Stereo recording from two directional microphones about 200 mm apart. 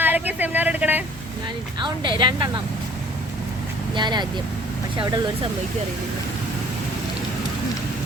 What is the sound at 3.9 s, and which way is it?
Speech, 20° right (ahead or behind).